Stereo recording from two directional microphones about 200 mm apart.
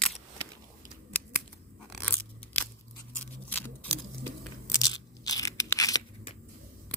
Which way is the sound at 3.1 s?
10° left (ahead or behind).